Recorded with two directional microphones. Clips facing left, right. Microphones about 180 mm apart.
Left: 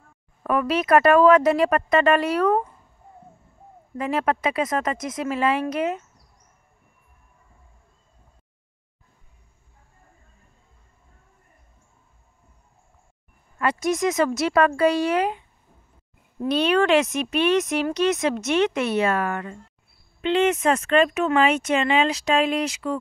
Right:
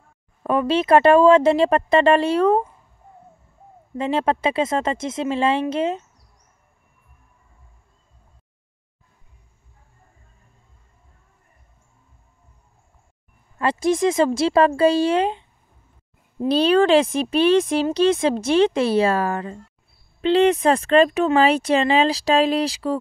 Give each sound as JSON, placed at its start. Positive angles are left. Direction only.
{"t": 0.4, "sound": "speech", "side_deg": -25}
{"t": 3.9, "sound": "speech", "side_deg": -25}
{"t": 13.6, "sound": "speech", "side_deg": -30}